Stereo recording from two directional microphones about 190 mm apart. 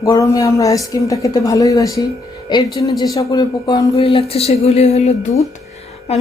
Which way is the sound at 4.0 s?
30° left (ahead or behind).